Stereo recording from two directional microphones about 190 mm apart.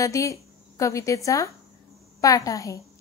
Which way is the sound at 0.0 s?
15° left (ahead or behind).